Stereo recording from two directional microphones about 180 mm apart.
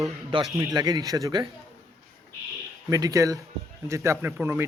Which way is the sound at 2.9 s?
20° right (ahead or behind).